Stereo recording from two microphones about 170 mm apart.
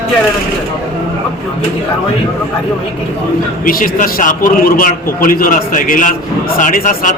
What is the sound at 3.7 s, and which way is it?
Speech, 55° left (ahead or behind).